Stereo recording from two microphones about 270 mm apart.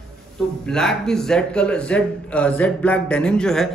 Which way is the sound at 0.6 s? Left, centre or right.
Centre.